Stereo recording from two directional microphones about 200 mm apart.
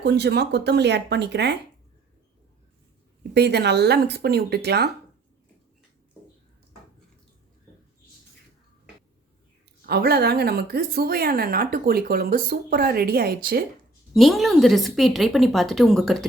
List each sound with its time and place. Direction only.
0.0 s speech: 55° right (ahead or behind)
3.3 s speech: 55° right (ahead or behind)
9.8 s a woman's voice: 50° right (ahead or behind)
14.1 s a woman's voice: centre (ahead or behind)